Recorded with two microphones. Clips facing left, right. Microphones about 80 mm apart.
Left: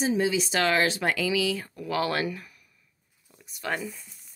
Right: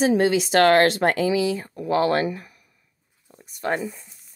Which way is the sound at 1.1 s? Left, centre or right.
Right.